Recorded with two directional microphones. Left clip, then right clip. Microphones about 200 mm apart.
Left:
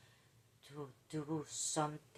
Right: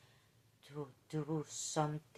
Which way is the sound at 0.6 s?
30° right (ahead or behind).